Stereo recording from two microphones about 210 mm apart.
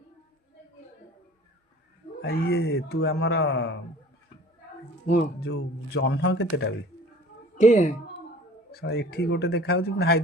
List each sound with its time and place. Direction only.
2.2 s a man's voice: 50° left (ahead or behind)
5.1 s speech: 50° left (ahead or behind)
7.6 s a woman's voice: 35° left (ahead or behind)
8.7 s a man's voice: 50° left (ahead or behind)